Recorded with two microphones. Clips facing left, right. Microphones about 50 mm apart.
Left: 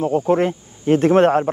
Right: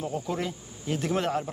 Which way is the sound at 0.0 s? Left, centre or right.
Left.